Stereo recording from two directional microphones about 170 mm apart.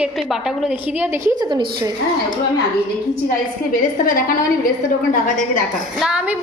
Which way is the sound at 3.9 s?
55° left (ahead or behind).